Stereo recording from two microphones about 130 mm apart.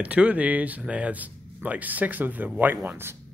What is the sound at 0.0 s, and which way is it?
Speech, 10° right (ahead or behind).